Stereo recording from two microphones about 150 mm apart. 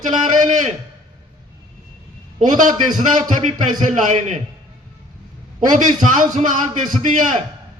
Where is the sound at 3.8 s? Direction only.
55° right (ahead or behind).